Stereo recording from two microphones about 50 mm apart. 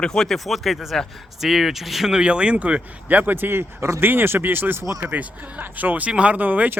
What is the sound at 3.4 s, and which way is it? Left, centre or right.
Speech, right.